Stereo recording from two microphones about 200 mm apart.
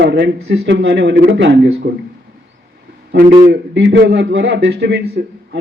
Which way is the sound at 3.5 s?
60° right (ahead or behind).